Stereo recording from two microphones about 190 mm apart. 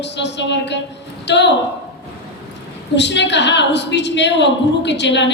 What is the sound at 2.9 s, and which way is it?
A woman's voice, 65° left (ahead or behind).